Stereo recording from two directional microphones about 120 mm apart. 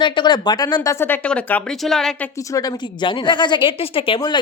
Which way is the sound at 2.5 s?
35° left (ahead or behind).